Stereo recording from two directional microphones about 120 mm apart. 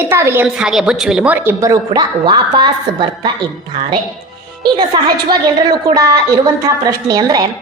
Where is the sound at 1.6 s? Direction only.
30° right (ahead or behind).